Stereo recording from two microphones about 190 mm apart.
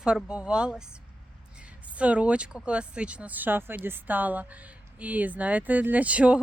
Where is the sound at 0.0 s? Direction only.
5° right (ahead or behind).